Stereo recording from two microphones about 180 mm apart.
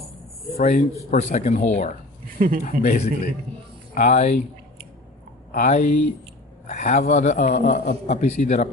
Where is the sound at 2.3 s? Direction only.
50° right (ahead or behind).